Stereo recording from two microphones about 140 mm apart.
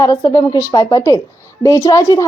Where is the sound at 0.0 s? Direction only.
25° left (ahead or behind).